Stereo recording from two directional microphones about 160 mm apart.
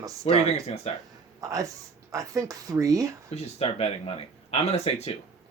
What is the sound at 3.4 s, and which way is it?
Speech, 40° left (ahead or behind).